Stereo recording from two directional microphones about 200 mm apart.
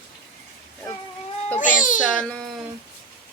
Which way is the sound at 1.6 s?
40° left (ahead or behind).